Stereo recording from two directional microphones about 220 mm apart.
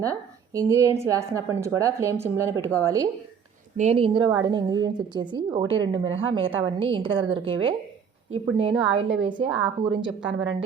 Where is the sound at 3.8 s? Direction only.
25° right (ahead or behind).